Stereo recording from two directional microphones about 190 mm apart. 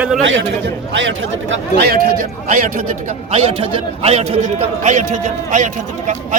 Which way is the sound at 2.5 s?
45° right (ahead or behind).